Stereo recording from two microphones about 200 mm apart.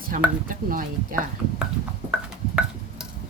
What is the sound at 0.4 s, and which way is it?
Speech, 45° right (ahead or behind).